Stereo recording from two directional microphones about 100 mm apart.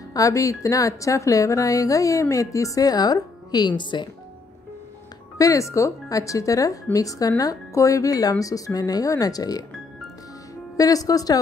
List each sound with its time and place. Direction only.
0.1 s speech: 35° left (ahead or behind); by 4.1 s 50° left (ahead or behind)
5.4 s speech: 30° left (ahead or behind)
10.8 s speech: 35° left (ahead or behind)